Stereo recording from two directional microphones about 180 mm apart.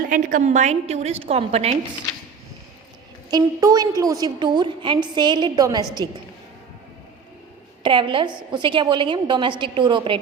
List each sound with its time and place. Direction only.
0.1 s a woman's voice: 45° right (ahead or behind)
3.2 s a woman's voice: 20° right (ahead or behind)
7.8 s a woman's voice: 25° right (ahead or behind)